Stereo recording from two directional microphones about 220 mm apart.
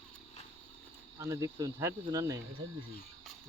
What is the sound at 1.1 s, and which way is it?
Speech, 15° right (ahead or behind).